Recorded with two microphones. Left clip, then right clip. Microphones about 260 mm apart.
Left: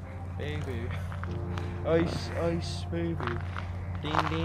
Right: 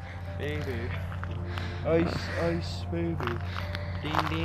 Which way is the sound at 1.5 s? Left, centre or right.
Centre.